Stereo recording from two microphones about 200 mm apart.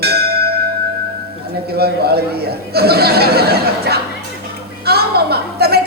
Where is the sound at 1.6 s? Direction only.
50° right (ahead or behind).